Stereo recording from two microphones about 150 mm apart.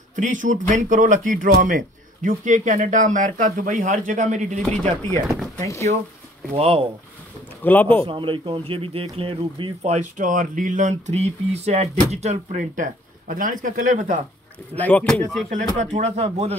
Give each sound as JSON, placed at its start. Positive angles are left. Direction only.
{"t": 0.1, "sound": "speech", "side_deg": -55}
{"t": 4.6, "sound": "speech", "side_deg": 5}
{"t": 5.7, "sound": "speech", "side_deg": 20}
{"t": 6.5, "sound": "speech", "side_deg": -40}
{"t": 7.6, "sound": "speech", "side_deg": 10}
{"t": 8.1, "sound": "speech", "side_deg": -35}
{"t": 14.8, "sound": "speech", "side_deg": 10}
{"t": 15.8, "sound": "speech", "side_deg": -50}